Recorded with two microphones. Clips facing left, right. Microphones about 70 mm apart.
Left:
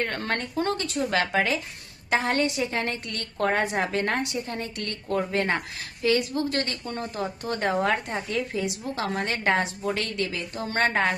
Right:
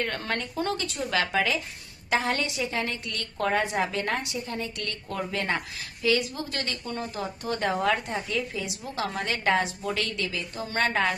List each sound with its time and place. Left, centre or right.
0.2 s a woman's voice: left